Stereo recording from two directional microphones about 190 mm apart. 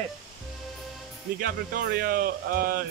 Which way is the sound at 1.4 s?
55° right (ahead or behind).